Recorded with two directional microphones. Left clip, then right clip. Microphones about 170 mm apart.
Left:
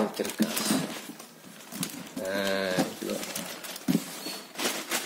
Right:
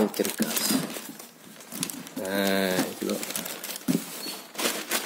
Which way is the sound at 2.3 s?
55° right (ahead or behind).